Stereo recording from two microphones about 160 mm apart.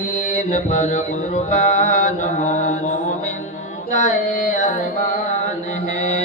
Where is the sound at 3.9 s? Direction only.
55° left (ahead or behind).